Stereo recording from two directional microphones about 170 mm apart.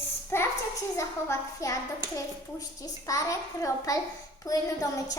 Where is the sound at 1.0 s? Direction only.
20° left (ahead or behind).